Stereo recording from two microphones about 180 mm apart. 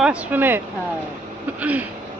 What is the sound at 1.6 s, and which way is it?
Speech, 10° right (ahead or behind).